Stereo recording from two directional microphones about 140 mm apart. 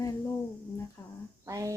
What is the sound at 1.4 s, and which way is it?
Speech, 25° right (ahead or behind).